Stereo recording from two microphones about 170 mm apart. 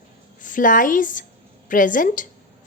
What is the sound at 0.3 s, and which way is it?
A woman's voice, 50° left (ahead or behind).